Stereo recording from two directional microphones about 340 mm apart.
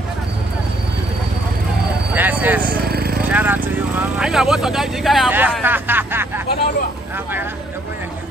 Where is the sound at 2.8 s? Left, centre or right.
Right.